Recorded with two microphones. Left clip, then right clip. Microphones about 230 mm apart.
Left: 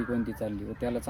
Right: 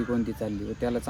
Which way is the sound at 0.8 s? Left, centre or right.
Centre.